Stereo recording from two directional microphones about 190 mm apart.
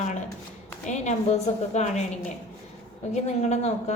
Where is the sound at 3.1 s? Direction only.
35° left (ahead or behind).